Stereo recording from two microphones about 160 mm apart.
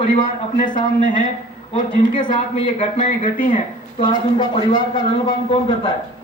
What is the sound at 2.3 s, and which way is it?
Speech, 50° left (ahead or behind).